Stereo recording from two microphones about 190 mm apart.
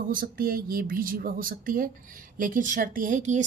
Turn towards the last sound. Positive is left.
turn(degrees=-40)  # may be behind; listen again after turning